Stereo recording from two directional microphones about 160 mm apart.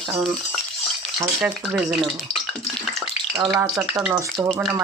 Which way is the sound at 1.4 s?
5° right (ahead or behind).